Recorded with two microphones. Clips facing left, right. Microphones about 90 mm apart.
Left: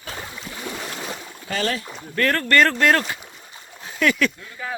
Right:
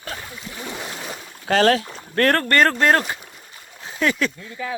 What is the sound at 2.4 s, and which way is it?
Speech, 40° right (ahead or behind).